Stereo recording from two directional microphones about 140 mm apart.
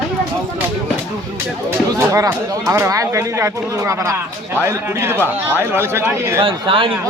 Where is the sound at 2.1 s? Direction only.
20° right (ahead or behind).